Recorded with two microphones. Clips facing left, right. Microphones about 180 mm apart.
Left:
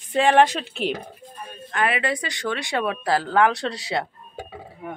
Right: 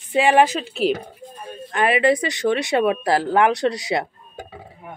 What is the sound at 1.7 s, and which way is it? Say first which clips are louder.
Speech: right 6 dB; 25° right (ahead or behind).